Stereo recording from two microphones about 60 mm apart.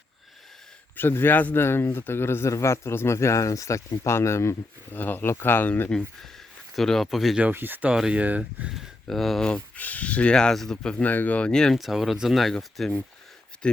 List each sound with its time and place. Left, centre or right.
0.9 s speech: left
2.5 s speech: left
3.9 s speech: left
4.9 s speech: left
6.7 s speech: centre
7.5 s speech: right
8.7 s speech: centre
9.4 s speech: centre
9.7 s speech: left
10.3 s speech: centre
11.0 s speech: left
11.5 s speech: centre
11.8 s speech: centre